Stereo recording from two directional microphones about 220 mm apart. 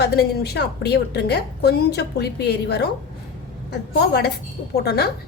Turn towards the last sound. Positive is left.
turn(degrees=45)  # may be behind; listen again after turning